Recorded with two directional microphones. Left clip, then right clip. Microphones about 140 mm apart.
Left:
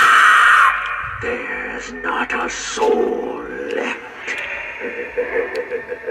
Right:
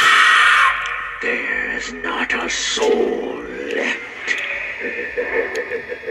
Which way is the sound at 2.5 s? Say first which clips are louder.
Right 1 dB; 25° right (ahead or behind).